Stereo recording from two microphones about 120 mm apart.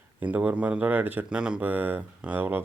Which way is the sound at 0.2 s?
15° right (ahead or behind).